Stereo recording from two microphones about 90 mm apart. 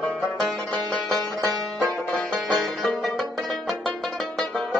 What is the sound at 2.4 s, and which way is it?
Music, centre (ahead or behind).